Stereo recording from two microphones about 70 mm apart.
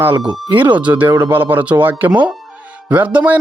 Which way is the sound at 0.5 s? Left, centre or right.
Right.